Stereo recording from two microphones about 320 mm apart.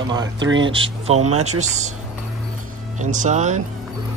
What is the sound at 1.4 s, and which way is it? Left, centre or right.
Speech, right.